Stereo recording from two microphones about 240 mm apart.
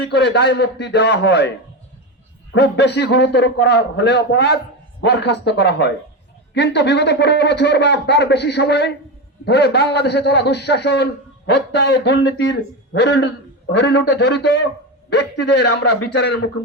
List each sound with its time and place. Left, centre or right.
0.0 s a man's voice: left